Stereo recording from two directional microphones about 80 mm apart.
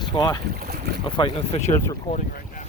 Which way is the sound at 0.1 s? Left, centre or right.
Left.